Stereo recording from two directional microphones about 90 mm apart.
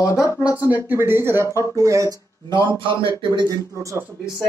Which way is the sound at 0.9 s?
25° right (ahead or behind).